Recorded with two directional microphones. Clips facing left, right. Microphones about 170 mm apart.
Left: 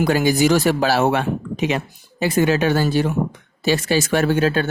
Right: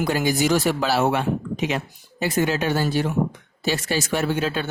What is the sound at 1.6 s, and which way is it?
Speech, 90° left.